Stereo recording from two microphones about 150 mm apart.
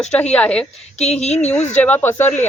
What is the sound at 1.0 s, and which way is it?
Speech, 45° left (ahead or behind).